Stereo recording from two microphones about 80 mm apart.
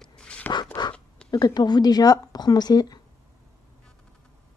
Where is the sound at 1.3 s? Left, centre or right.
Left.